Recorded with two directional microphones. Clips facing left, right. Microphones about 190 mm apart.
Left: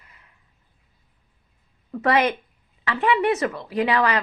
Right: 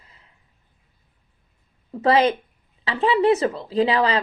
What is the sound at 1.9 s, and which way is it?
Speech, 25° right (ahead or behind).